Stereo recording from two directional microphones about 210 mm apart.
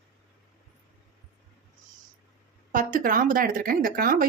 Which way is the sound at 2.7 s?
40° right (ahead or behind).